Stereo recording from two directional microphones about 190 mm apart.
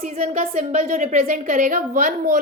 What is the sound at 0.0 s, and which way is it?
A woman's voice, 35° right (ahead or behind).